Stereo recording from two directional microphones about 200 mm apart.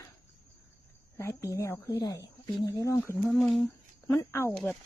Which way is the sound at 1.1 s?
15° left (ahead or behind).